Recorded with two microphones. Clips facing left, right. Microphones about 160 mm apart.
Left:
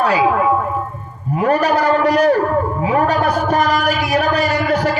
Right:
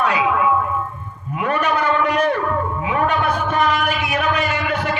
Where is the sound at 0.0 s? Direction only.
35° left (ahead or behind).